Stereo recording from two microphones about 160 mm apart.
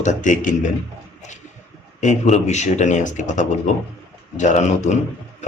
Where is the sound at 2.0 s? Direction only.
50° left (ahead or behind).